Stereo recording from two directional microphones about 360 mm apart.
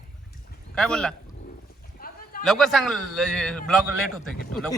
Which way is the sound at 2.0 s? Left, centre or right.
Left.